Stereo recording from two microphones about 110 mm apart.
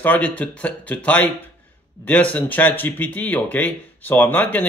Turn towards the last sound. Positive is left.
turn(degrees=15)  # may be behind; listen again after turning